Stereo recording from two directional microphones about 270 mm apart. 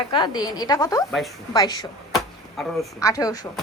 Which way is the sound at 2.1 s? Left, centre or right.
Centre.